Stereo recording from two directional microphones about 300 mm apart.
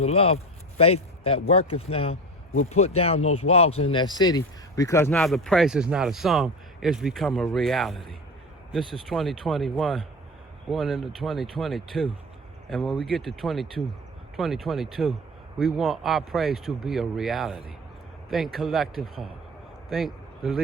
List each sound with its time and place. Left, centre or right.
0.0 s a man's voice: centre